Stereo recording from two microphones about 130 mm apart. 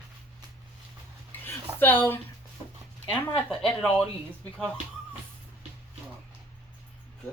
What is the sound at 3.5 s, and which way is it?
Speech, 5° left (ahead or behind).